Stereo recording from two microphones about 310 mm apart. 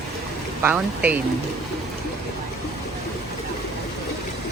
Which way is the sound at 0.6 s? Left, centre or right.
Centre.